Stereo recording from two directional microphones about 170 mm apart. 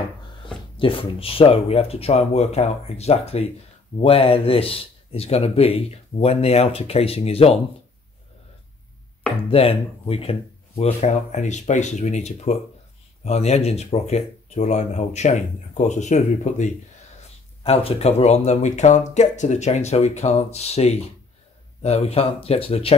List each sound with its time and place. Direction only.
0.5 s speech: 30° left (ahead or behind)
9.5 s speech: 35° left (ahead or behind)